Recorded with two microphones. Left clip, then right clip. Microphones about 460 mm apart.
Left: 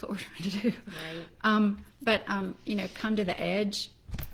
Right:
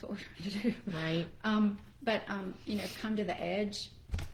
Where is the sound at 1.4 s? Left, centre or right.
Left.